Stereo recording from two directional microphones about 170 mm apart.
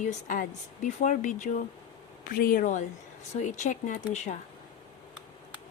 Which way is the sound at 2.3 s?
60° left (ahead or behind).